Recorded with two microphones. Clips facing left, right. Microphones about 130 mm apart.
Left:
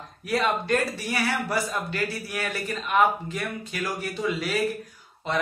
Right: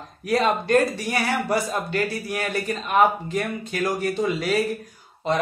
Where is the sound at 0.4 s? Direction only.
45° right (ahead or behind).